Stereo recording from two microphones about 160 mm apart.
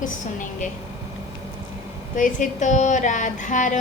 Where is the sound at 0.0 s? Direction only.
55° left (ahead or behind).